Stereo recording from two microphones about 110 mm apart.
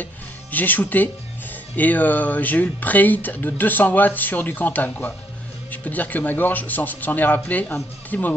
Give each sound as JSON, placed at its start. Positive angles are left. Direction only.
{"t": 0.0, "sound": "speech", "side_deg": 15}